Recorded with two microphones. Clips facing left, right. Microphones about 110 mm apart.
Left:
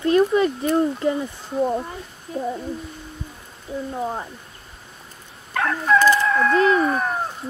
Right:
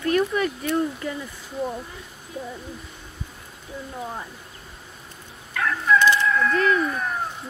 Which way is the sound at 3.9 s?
25° left (ahead or behind).